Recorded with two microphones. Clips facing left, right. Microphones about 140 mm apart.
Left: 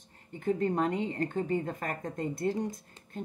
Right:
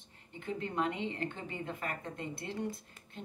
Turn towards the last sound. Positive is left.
turn(degrees=45)  # may be behind; listen again after turning